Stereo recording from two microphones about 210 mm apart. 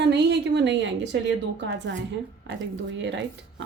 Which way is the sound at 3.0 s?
60° right (ahead or behind).